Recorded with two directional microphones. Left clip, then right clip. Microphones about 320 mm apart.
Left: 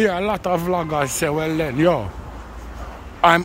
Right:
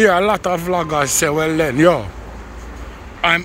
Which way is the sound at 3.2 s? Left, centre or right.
Centre.